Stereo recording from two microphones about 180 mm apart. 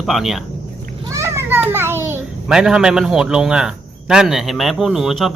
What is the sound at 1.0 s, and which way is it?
Children playing, 15° right (ahead or behind).